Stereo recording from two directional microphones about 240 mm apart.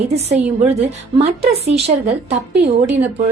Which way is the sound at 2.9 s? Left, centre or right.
Centre.